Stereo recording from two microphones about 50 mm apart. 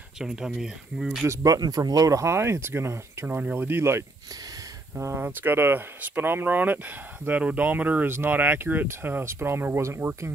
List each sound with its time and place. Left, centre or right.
0.2 s speech: centre
1.2 s speech: right
3.5 s speech: right
5.1 s speech: right
9.2 s speech: right
9.8 s speech: right